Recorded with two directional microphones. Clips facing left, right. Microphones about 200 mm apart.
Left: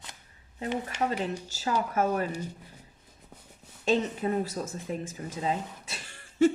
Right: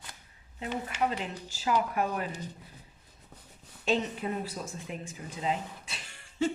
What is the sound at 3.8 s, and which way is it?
Speech, 40° left (ahead or behind).